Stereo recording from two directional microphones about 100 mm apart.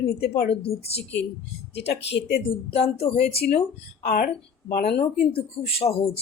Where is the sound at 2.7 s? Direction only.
80° left.